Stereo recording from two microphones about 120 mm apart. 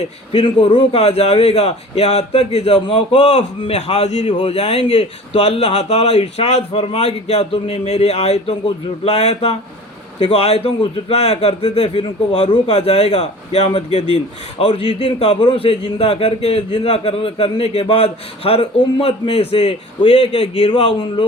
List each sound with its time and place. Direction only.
0.3 s a man's voice: 45° left (ahead or behind)
20.6 s speech: 55° left (ahead or behind)